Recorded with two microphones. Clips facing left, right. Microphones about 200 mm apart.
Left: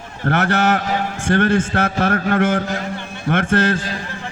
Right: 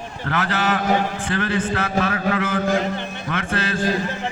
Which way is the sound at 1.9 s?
45° left (ahead or behind).